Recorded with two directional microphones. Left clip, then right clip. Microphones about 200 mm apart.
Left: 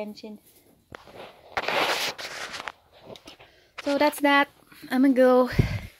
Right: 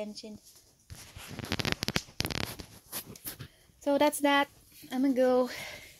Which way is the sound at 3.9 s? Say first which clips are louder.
Left 4 dB; 5° right (ahead or behind).